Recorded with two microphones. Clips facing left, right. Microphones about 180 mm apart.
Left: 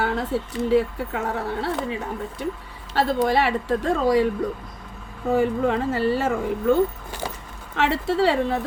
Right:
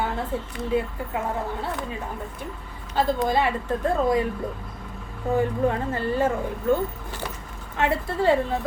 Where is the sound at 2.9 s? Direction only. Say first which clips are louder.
Left 2 dB; 75° left (ahead or behind); by 4.2 s 90° left.